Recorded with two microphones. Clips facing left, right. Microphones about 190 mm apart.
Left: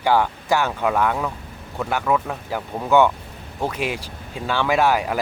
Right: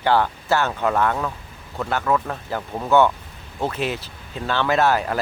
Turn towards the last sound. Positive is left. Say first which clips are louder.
# even
turn(degrees=10)  # may be behind; listen again after turning